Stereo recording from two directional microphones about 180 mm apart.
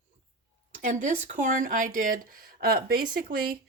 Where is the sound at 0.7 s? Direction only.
45° right (ahead or behind).